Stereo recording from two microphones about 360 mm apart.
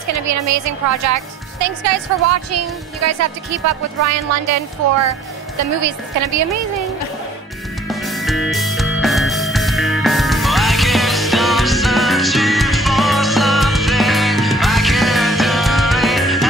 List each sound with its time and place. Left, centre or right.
0.1 s speech: right
5.6 s speech: right
7.9 s music: centre